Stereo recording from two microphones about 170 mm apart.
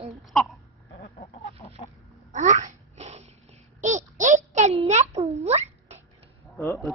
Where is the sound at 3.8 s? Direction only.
45° right (ahead or behind).